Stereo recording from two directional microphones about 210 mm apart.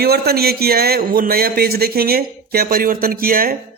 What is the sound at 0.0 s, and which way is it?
A man's voice, 50° right (ahead or behind).